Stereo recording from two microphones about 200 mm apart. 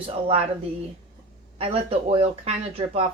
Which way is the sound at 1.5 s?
30° right (ahead or behind).